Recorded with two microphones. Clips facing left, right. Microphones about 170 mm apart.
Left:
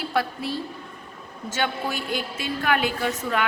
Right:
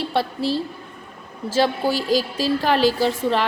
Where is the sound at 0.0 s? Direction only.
30° right (ahead or behind).